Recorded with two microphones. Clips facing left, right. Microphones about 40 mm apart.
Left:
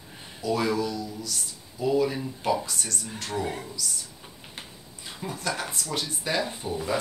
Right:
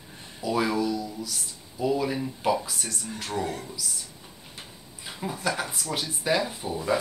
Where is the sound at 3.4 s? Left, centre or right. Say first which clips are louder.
Even; centre.